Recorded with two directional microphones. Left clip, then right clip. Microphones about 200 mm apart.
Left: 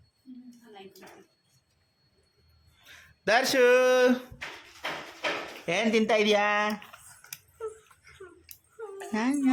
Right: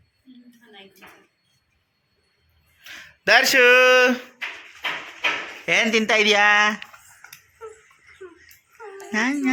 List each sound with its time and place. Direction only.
2.8 s speech: centre (ahead or behind)
4.4 s a sound: 50° left (ahead or behind)
5.6 s speech: centre (ahead or behind)
9.1 s speech: centre (ahead or behind)